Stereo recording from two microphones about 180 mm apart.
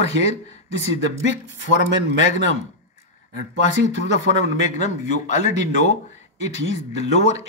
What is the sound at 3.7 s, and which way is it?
Speech, 40° left (ahead or behind).